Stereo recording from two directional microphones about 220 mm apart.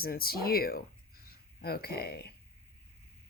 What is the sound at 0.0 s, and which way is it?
Speech, 45° left (ahead or behind).